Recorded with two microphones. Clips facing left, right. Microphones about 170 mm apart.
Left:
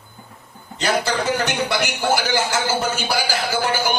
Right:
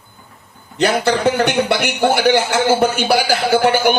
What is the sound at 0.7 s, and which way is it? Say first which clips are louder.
A man's voice: right 5 dB; 60° right (ahead or behind).